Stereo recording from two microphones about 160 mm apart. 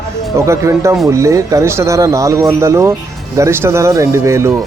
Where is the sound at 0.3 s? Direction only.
15° right (ahead or behind).